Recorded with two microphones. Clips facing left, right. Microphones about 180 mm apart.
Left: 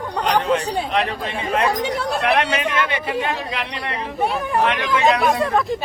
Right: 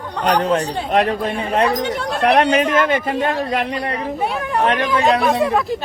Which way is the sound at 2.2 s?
40° right (ahead or behind).